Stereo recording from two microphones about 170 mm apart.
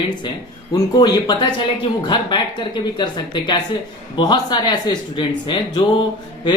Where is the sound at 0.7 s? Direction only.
25° left (ahead or behind).